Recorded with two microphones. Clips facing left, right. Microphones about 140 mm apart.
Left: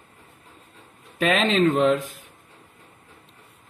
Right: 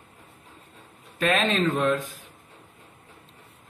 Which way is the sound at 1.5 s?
65° left (ahead or behind).